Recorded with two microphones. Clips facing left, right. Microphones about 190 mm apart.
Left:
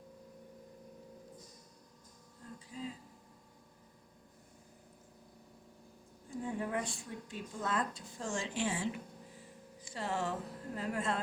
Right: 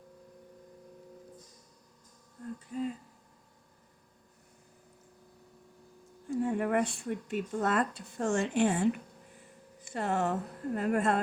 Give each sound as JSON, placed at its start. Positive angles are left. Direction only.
{"t": 2.6, "sound": "speech", "side_deg": -55}
{"t": 6.3, "sound": "speech", "side_deg": -70}